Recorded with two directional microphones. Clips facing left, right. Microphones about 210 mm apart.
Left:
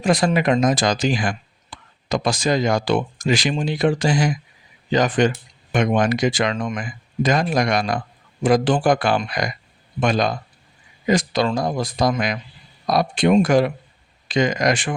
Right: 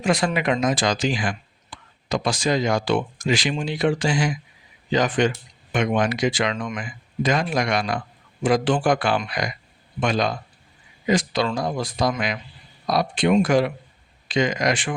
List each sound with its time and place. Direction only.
0.0 s speech: 35° left (ahead or behind)
1.7 s a sound: 40° left (ahead or behind)
2.0 s speech: 45° left (ahead or behind)